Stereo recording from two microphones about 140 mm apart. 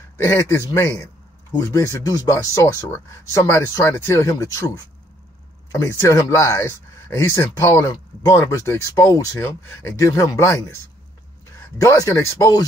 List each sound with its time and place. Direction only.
0.2 s speech: 20° left (ahead or behind)
11.8 s speech: 20° left (ahead or behind)